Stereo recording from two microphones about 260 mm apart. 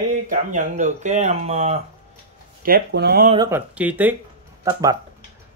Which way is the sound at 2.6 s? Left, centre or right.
Right.